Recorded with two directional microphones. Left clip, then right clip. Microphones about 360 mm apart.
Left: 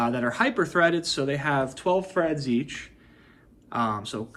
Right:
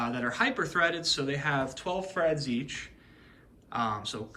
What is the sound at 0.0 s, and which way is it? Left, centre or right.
Speech, centre.